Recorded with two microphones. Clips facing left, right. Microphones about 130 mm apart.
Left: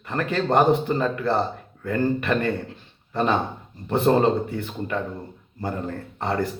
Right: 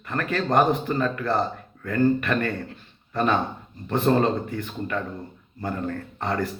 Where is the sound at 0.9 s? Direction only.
15° left (ahead or behind).